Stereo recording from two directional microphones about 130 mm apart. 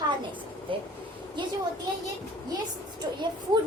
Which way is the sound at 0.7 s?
40° right (ahead or behind).